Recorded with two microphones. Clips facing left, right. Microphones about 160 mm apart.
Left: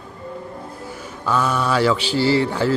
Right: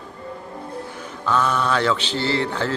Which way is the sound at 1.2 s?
10° left (ahead or behind).